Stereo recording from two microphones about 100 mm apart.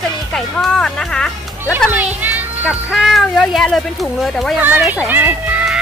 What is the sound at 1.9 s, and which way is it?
Music, 15° right (ahead or behind).